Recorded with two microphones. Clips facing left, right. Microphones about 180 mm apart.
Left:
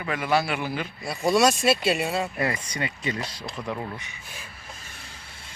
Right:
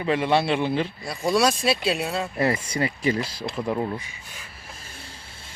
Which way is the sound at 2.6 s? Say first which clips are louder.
Right 6 dB; 30° right (ahead or behind).